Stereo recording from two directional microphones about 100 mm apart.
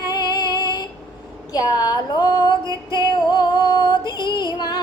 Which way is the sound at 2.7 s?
45° left (ahead or behind).